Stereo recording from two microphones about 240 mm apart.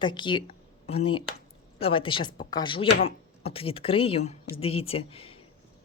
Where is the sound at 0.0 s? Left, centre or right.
Centre.